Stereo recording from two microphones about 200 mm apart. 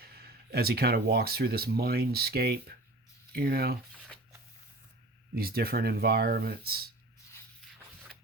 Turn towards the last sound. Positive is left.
turn(degrees=-50)  # may be behind; listen again after turning